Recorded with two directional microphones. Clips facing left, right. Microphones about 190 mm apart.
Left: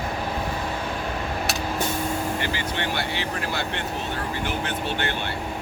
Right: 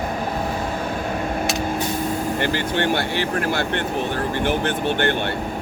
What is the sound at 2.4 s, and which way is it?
Speech, 55° right (ahead or behind).